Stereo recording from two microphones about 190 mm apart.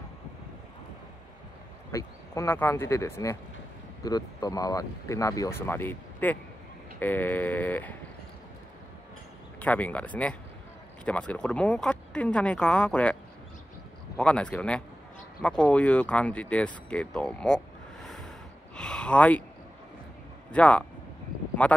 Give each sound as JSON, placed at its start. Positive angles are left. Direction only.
{"t": 1.9, "sound": "speech", "side_deg": 15}
{"t": 9.6, "sound": "speech", "side_deg": 10}
{"t": 18.0, "sound": "a sound", "side_deg": 0}
{"t": 20.5, "sound": "speech", "side_deg": 5}